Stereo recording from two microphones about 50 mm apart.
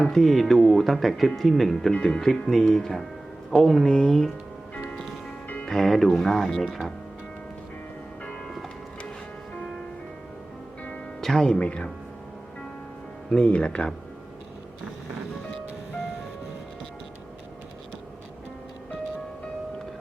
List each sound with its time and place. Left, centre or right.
0.0 s speech: centre
1.9 s speech: centre
5.6 s speech: centre
8.2 s church bell: centre
11.2 s speech: centre
11.6 s speech: left
13.3 s speech: left